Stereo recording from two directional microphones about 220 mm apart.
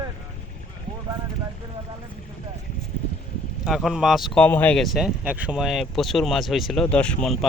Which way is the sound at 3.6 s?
Centre (ahead or behind).